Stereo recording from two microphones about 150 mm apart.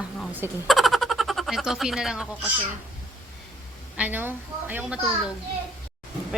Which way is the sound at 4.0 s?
10° right (ahead or behind).